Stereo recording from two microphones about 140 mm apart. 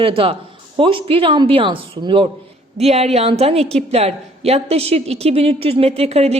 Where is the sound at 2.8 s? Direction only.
50° right (ahead or behind).